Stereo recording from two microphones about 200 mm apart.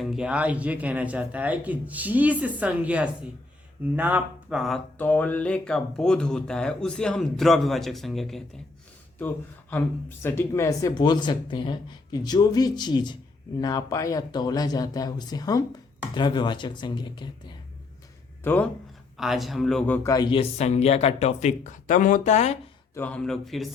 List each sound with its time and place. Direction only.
0.0 s speech: 5° right (ahead or behind); by 17.5 s 25° left (ahead or behind)
18.4 s speech: 10° left (ahead or behind)
19.1 s speech: centre (ahead or behind)
20.0 s speech: 20° left (ahead or behind); by 22.5 s 35° left (ahead or behind)
23.0 s speech: 5° left (ahead or behind)